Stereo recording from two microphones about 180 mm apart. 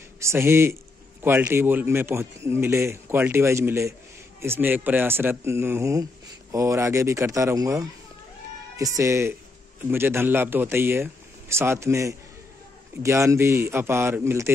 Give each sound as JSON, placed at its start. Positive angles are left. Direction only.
{"t": 0.2, "sound": "speech", "side_deg": -15}